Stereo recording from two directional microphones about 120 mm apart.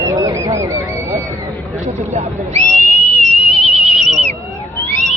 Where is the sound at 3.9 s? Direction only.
75° right (ahead or behind).